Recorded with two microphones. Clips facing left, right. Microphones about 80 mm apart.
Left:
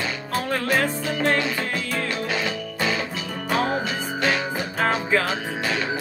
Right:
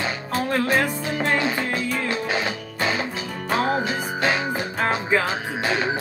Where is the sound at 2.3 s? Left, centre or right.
Right.